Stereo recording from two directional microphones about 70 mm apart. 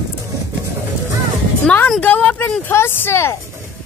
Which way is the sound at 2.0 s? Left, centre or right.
Left.